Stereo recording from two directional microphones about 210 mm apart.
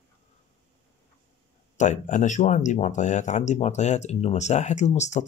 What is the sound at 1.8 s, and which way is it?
Speech, 35° left (ahead or behind).